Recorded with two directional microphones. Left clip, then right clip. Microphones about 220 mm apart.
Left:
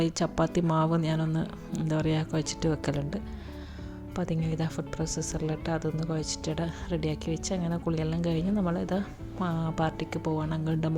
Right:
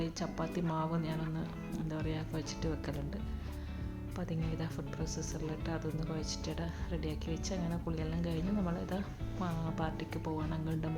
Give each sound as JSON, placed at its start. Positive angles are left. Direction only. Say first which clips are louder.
{"t": 0.0, "sound": "speech", "louder": "left 11 dB", "side_deg": 35}